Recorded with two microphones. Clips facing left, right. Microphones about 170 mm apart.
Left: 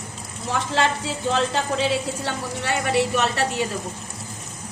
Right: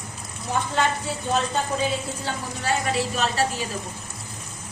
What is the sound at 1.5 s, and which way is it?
A woman's voice, 90° left.